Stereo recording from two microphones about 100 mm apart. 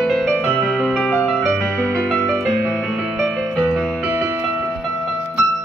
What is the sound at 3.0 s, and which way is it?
Music, 10° right (ahead or behind).